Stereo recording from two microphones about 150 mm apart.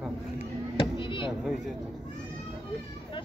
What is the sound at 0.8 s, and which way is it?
Chop, 35° left (ahead or behind).